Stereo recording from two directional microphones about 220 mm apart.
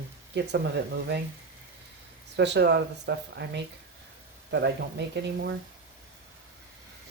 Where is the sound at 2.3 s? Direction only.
50° right (ahead or behind).